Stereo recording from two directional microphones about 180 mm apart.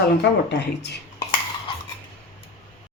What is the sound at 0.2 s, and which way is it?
Speech, 70° left (ahead or behind).